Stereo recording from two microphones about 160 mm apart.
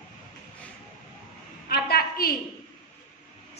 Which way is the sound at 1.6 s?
75° left (ahead or behind).